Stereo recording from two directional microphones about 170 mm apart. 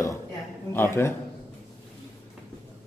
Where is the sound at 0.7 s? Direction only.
15° left (ahead or behind).